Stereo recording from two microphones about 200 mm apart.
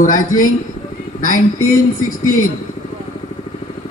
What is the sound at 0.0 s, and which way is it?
A woman's voice, 40° left (ahead or behind).